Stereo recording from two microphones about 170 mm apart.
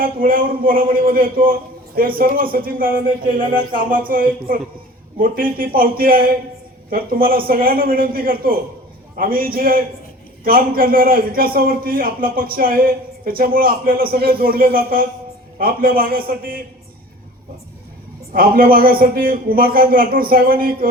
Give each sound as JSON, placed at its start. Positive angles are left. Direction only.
{"t": 0.0, "sound": "a man's voice", "side_deg": -55}
{"t": 18.3, "sound": "a man's voice", "side_deg": -60}